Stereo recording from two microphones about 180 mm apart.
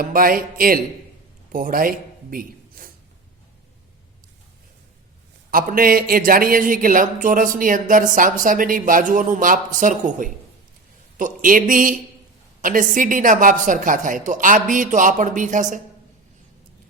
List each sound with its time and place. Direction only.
0.0 s a man's voice: 50° right (ahead or behind)
5.5 s speech: 50° right (ahead or behind)